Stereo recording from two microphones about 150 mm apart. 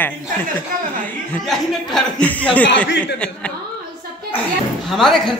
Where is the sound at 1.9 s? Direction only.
5° left (ahead or behind).